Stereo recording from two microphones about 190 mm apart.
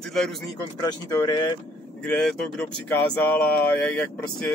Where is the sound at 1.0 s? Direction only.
20° left (ahead or behind).